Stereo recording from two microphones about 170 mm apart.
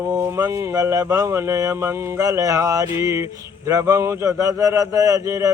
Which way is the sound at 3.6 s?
20° right (ahead or behind).